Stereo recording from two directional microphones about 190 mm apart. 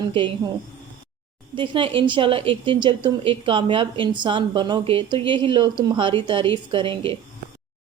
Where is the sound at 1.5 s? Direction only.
25° right (ahead or behind).